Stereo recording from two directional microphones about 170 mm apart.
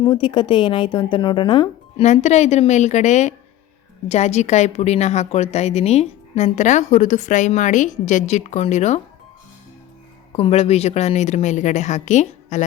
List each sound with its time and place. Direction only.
0.0 s speech: 30° left (ahead or behind)
2.0 s a woman's voice: 40° left (ahead or behind)
10.3 s a woman's voice: 35° left (ahead or behind)